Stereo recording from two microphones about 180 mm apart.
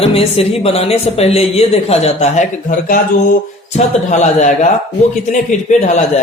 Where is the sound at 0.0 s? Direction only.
30° left (ahead or behind).